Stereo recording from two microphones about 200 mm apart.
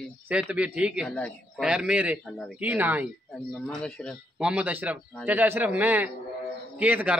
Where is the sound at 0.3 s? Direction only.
5° right (ahead or behind).